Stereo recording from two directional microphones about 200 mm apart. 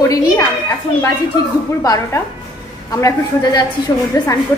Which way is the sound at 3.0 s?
15° left (ahead or behind).